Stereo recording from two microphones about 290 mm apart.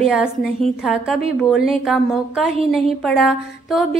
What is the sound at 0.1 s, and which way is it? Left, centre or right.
A woman's voice, centre.